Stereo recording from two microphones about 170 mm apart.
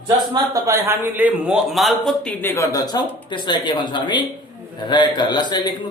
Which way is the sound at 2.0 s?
10° left (ahead or behind).